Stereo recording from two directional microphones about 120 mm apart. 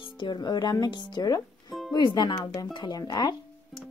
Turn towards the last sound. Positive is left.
turn(degrees=35)  # may be behind; listen again after turning